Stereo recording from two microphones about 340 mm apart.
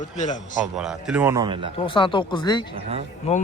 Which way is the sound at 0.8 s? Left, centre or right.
Centre.